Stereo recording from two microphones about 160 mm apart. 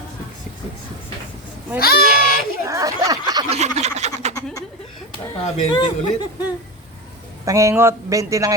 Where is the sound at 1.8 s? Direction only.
75° left (ahead or behind).